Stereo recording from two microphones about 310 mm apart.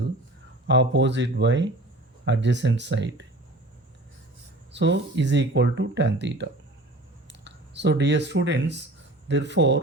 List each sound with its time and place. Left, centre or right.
0.7 s speech: right
4.7 s speech: right